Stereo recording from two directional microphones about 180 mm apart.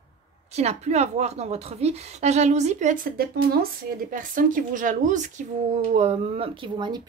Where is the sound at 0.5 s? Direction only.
35° right (ahead or behind).